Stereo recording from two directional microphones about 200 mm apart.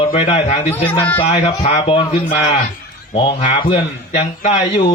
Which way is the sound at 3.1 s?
25° left (ahead or behind).